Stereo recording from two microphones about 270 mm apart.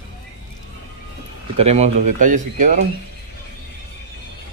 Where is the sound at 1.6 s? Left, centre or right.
Right.